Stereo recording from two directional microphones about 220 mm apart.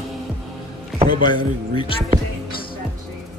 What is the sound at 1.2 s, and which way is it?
Speech, 20° left (ahead or behind).